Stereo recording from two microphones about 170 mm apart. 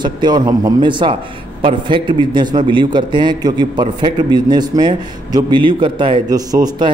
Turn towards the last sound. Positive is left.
turn(degrees=-25)  # may be behind; listen again after turning